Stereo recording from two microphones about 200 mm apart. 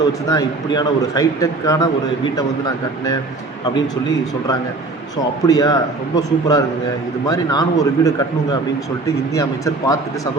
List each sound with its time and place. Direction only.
0.0 s a man's voice: 15° left (ahead or behind)
5.1 s a man's voice: 20° left (ahead or behind)